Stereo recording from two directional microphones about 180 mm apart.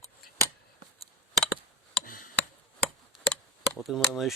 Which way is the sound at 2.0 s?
50° left (ahead or behind).